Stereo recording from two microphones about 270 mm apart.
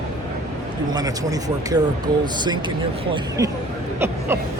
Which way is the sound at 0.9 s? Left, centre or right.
Centre.